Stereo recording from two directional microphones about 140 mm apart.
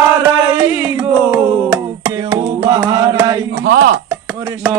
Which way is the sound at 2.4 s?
40° right (ahead or behind).